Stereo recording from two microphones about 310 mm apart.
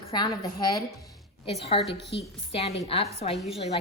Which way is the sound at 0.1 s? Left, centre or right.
Centre.